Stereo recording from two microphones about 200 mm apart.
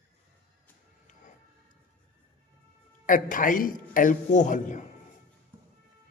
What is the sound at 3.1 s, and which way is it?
A man's voice, 40° left (ahead or behind).